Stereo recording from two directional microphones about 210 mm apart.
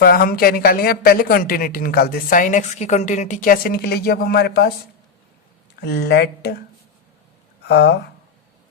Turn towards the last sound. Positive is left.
turn(degrees=50)  # may be behind; listen again after turning